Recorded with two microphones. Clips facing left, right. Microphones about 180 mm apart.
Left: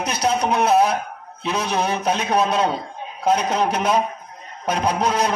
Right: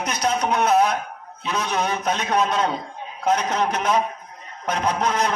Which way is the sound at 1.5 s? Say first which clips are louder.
Left 2 dB; 30° left (ahead or behind).